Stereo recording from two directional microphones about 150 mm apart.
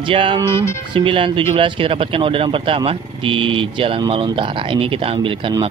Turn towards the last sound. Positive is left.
turn(degrees=-35)  # may be behind; listen again after turning